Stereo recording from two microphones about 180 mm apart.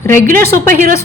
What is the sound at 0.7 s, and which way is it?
Speech, 50° right (ahead or behind).